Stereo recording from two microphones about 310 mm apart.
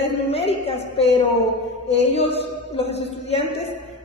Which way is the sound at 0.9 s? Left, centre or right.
Centre.